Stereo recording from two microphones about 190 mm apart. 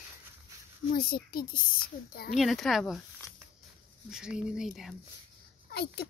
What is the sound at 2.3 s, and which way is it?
Speech, centre (ahead or behind).